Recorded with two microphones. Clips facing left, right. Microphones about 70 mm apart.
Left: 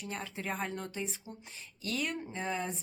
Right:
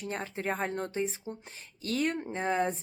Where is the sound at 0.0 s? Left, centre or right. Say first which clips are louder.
Right 5 dB; right.